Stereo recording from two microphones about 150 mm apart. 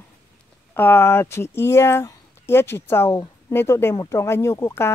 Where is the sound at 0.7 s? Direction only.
15° left (ahead or behind).